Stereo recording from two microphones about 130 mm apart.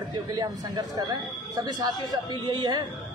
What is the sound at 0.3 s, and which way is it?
Speech, 30° right (ahead or behind).